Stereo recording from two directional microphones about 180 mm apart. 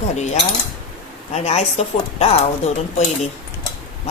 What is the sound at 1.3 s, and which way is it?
Speech, 35° left (ahead or behind).